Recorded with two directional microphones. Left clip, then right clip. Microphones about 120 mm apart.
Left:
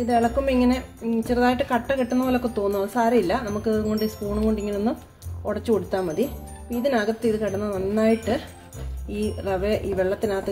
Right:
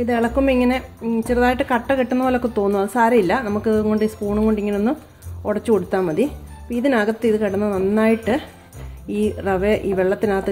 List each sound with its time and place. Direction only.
0.0 s speech: 50° right (ahead or behind)